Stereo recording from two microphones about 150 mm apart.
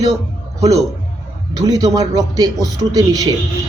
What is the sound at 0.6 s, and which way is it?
A man's voice, 25° right (ahead or behind).